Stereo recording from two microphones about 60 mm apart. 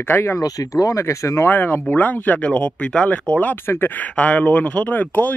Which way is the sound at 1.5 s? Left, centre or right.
Left.